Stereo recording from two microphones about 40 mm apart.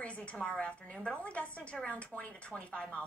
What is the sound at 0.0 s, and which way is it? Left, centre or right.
A woman's voice, left.